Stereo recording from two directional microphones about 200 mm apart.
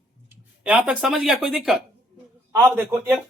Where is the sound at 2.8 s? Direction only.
10° right (ahead or behind).